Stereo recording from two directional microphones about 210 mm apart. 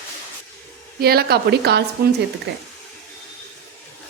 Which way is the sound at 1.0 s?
50° right (ahead or behind).